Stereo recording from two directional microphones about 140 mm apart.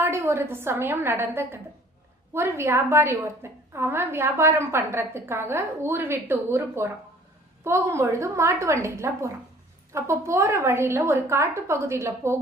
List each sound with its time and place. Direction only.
0.0 s a woman's voice: 15° right (ahead or behind)